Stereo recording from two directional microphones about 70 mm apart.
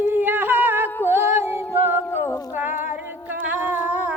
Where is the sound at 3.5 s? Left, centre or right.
Right.